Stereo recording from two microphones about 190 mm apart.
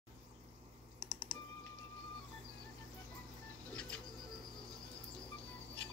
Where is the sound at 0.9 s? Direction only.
10° right (ahead or behind).